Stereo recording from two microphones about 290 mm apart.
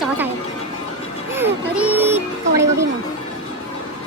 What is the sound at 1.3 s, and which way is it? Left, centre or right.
Speech, centre.